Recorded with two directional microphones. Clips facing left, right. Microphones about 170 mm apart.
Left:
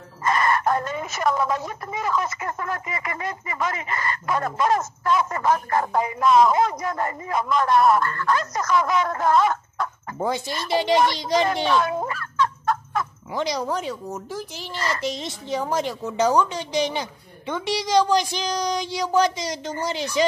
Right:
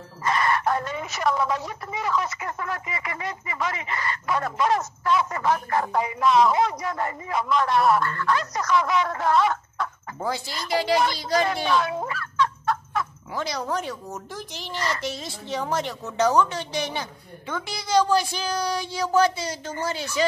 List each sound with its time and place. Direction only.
0.2 s speech: 45° left (ahead or behind)
10.1 s a woman's voice: 20° left (ahead or behind)
11.4 s music: 45° left (ahead or behind)
13.3 s a woman's voice: 15° left (ahead or behind)